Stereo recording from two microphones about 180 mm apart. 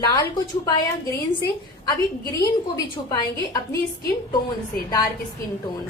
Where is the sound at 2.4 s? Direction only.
20° left (ahead or behind).